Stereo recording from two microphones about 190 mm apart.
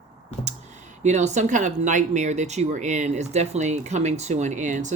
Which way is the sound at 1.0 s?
40° right (ahead or behind).